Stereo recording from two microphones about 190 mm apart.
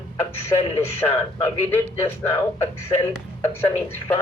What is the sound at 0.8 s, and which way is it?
Speech, 10° left (ahead or behind).